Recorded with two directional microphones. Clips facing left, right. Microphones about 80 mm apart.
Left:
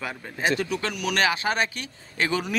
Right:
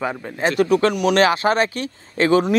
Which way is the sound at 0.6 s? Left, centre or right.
Right.